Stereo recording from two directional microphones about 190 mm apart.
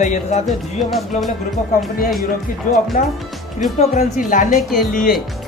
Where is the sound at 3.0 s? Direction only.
45° left (ahead or behind).